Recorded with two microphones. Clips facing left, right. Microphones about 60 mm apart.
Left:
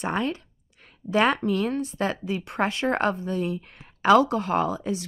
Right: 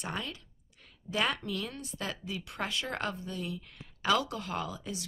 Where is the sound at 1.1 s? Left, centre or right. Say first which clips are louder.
Left 10 dB; left.